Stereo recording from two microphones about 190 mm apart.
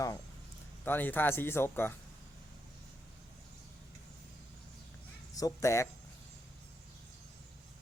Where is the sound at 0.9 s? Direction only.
10° left (ahead or behind).